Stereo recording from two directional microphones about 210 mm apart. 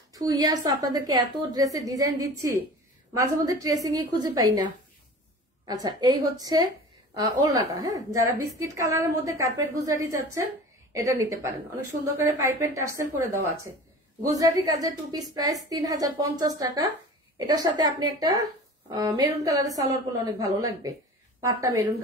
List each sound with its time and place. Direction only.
0.1 s a woman's voice: 15° right (ahead or behind)
5.7 s a woman's voice: 20° right (ahead or behind)
14.3 s a woman's voice: 15° right (ahead or behind)